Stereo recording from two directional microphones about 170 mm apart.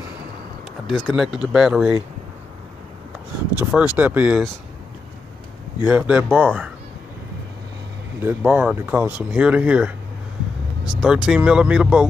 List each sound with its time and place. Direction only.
0.8 s speech: centre (ahead or behind)
3.7 s speech: 5° right (ahead or behind)
5.9 s speech: 10° right (ahead or behind)
8.2 s speech: 10° right (ahead or behind)